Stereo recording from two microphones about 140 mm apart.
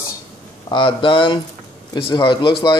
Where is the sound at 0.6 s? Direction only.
35° left (ahead or behind).